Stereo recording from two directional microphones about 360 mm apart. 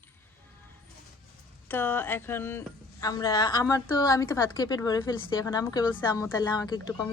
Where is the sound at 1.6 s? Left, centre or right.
Centre.